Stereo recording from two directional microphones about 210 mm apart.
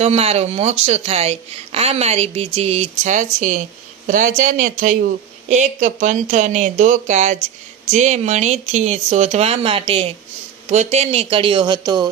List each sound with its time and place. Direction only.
0.0 s a woman's voice: 30° right (ahead or behind)